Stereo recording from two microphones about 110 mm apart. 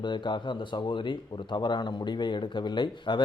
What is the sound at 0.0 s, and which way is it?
Speech, 45° left (ahead or behind).